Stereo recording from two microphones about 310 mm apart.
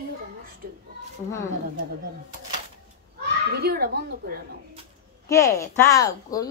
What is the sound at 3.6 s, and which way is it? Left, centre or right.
Speech, right.